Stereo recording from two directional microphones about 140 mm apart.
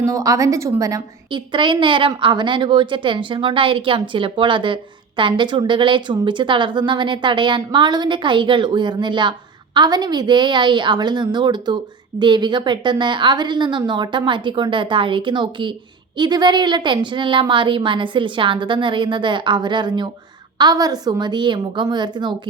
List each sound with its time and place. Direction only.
0.0 s a woman's voice: 25° right (ahead or behind)